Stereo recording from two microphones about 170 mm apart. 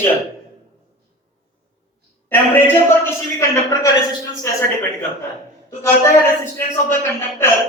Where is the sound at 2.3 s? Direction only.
10° left (ahead or behind).